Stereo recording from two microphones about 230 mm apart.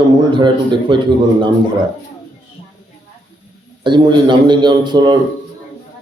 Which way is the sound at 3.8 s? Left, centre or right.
Centre.